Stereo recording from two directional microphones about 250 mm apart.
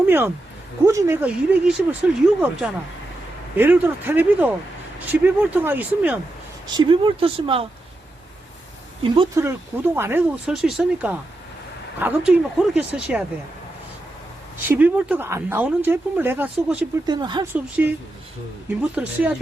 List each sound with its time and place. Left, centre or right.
0.0 s a sound: centre
0.9 s speech: centre
6.7 s speech: centre
9.1 s speech: centre
14.7 s speech: centre
18.7 s speech: centre